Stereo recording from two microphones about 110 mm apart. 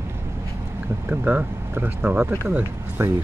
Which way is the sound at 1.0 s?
15° right (ahead or behind).